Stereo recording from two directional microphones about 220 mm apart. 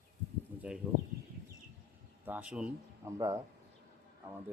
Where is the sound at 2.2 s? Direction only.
5° right (ahead or behind).